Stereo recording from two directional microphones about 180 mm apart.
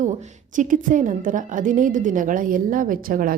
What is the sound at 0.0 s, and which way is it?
A woman's voice, 45° right (ahead or behind).